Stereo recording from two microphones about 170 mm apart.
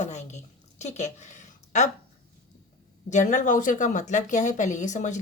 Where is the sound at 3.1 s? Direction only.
45° left (ahead or behind).